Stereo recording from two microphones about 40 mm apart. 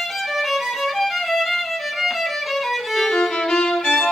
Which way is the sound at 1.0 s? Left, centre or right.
Centre.